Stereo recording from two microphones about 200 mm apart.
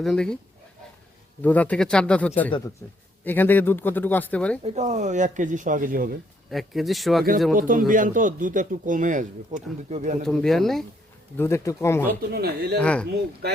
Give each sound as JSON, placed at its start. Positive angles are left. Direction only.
{"t": 0.0, "sound": "speech", "side_deg": 5}
{"t": 1.4, "sound": "speech", "side_deg": 10}
{"t": 4.6, "sound": "a man's voice", "side_deg": -35}
{"t": 6.5, "sound": "speech", "side_deg": 0}
{"t": 7.5, "sound": "a man's voice", "side_deg": -45}
{"t": 10.2, "sound": "speech", "side_deg": 0}
{"t": 11.3, "sound": "speech", "side_deg": 15}
{"t": 12.3, "sound": "speech", "side_deg": -50}
{"t": 12.8, "sound": "speech", "side_deg": 5}